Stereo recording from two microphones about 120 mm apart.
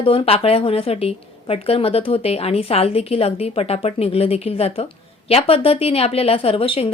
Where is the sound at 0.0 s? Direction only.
50° left (ahead or behind).